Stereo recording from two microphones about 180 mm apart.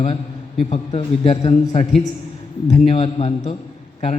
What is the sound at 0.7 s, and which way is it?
A man's voice, 35° left (ahead or behind).